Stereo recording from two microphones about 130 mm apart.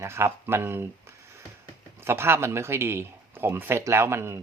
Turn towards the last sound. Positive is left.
turn(degrees=-20)  # may be behind; listen again after turning